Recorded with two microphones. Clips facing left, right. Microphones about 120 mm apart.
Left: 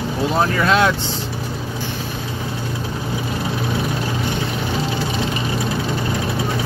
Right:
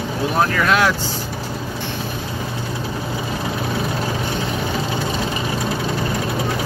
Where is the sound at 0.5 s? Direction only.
30° left (ahead or behind).